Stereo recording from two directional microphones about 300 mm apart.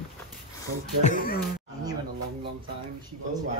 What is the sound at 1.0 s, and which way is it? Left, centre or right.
Speech, left.